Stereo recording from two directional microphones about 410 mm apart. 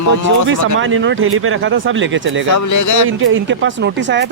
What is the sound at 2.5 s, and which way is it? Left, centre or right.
Speech, left.